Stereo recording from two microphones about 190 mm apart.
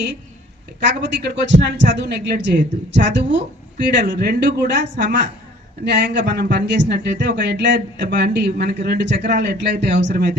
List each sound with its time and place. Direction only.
0.8 s a man's voice: 65° right (ahead or behind)